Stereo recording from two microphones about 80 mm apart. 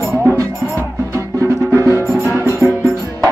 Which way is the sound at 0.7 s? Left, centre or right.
Right.